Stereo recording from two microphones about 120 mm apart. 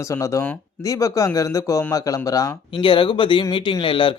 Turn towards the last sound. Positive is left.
turn(degrees=45)  # may be behind; listen again after turning